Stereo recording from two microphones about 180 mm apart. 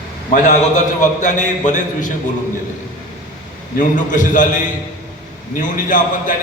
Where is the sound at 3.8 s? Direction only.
45° left (ahead or behind).